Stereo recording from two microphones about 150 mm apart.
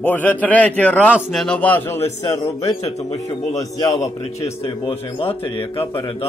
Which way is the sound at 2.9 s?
45° left (ahead or behind).